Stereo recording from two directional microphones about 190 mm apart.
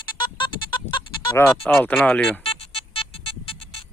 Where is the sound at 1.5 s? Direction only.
Centre (ahead or behind).